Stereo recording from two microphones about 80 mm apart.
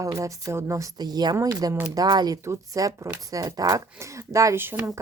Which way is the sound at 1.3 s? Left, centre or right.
Right.